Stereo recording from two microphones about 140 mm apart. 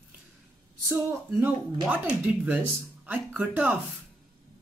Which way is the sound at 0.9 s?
15° right (ahead or behind).